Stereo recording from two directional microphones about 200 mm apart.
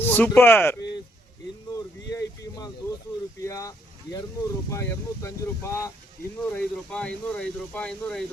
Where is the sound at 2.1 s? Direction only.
15° left (ahead or behind).